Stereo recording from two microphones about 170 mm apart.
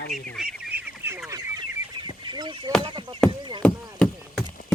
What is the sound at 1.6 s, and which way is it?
Goose, 25° right (ahead or behind).